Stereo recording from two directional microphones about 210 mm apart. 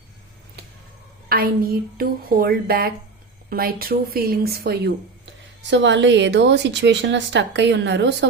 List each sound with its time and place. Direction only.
1.3 s a woman's voice: 45° right (ahead or behind)